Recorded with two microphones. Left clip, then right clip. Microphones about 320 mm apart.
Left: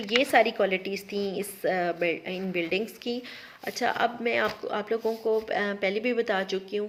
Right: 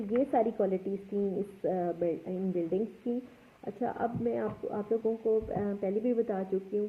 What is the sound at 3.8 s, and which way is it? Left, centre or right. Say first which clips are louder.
A woman's voice: left 6 dB; left.